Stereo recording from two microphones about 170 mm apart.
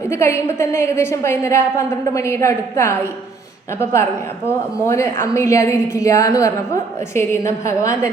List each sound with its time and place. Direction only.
0.1 s a woman's voice: 15° left (ahead or behind)
4.4 s a woman's voice: 15° left (ahead or behind)